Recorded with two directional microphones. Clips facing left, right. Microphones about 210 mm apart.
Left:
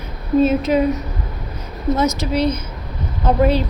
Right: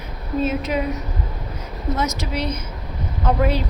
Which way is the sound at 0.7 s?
35° left (ahead or behind).